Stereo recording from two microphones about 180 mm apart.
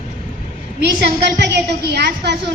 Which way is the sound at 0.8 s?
70° right (ahead or behind).